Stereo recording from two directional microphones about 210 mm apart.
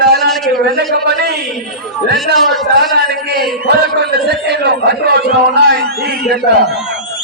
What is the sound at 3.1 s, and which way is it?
A man's voice, 50° right (ahead or behind).